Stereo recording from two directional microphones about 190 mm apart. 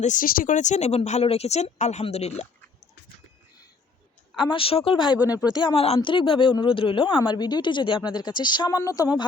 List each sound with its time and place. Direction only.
0.0 s speech: 45° left (ahead or behind)
4.4 s a woman's voice: 25° left (ahead or behind)
5.1 s speech: 10° right (ahead or behind)
5.6 s a woman's voice: 30° left (ahead or behind)